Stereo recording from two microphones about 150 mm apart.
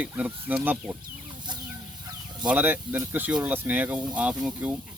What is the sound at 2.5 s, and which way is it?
Speech, 10° right (ahead or behind).